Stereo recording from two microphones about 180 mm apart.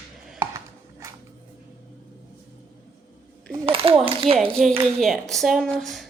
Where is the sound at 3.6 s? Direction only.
30° right (ahead or behind).